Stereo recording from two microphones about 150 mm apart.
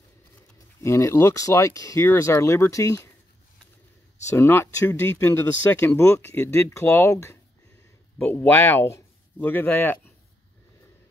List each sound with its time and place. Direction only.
0.7 s speech: 20° left (ahead or behind)
4.3 s speech: 15° left (ahead or behind)